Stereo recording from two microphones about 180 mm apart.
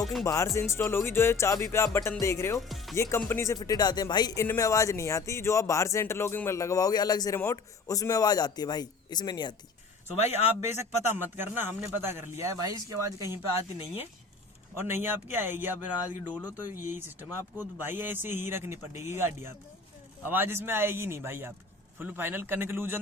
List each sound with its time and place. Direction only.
0.0 s music: centre (ahead or behind)
0.3 s speech: 15° left (ahead or behind)
2.6 s speech: centre (ahead or behind)
2.9 s speech: 15° left (ahead or behind)
11.0 s speech: 10° right (ahead or behind)
14.8 s speech: 15° right (ahead or behind)